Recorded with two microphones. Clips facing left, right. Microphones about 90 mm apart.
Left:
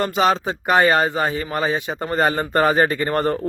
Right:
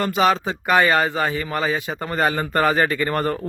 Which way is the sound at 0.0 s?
30° left (ahead or behind).